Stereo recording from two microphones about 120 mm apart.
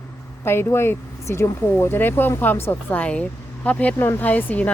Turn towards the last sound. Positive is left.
turn(degrees=15)  # may be behind; listen again after turning